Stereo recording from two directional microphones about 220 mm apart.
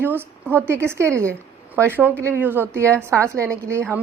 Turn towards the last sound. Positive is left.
turn(degrees=-10)  # may be behind; listen again after turning